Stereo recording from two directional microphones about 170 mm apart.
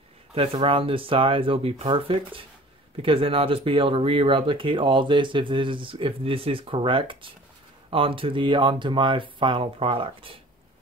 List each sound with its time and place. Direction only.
0.3 s speech: 35° right (ahead or behind)